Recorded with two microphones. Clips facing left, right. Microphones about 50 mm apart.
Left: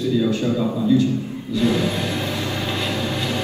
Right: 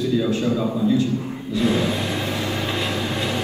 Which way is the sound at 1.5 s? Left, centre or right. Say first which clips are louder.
Left 1 dB; right.